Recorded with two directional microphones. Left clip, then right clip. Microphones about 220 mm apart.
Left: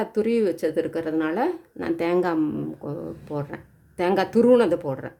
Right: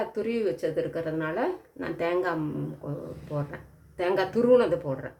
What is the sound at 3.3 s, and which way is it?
Speech, 45° left (ahead or behind).